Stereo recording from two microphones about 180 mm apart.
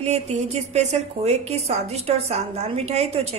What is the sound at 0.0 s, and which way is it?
A woman's voice, 35° right (ahead or behind).